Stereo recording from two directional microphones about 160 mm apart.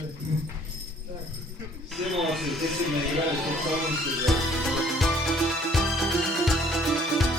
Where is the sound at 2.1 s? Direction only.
Centre (ahead or behind).